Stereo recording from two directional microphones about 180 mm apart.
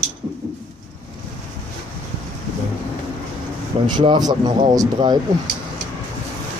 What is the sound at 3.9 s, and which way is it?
Speech, 25° right (ahead or behind).